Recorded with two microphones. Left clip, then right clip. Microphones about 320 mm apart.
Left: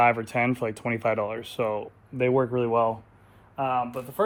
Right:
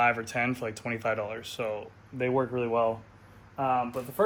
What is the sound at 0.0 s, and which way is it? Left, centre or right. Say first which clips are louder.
Speech: left 4 dB; left.